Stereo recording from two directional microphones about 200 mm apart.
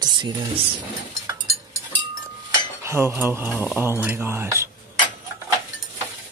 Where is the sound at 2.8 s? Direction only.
15° right (ahead or behind).